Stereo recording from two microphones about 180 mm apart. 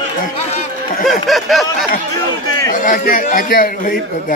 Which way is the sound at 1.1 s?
Centre (ahead or behind).